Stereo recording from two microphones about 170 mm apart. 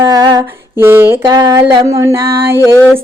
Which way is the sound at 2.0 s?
15° right (ahead or behind).